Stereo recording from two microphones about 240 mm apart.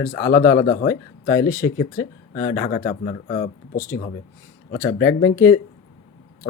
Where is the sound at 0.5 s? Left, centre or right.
Left.